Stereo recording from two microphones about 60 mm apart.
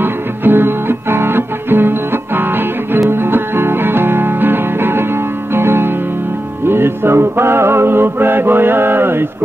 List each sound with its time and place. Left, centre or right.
0.0 s music: right